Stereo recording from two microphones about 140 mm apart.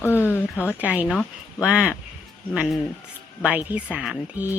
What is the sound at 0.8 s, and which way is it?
A woman's voice, 10° right (ahead or behind).